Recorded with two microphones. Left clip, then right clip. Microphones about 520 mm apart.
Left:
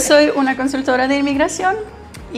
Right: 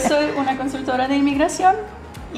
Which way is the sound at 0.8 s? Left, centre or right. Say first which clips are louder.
Left 3 dB; left.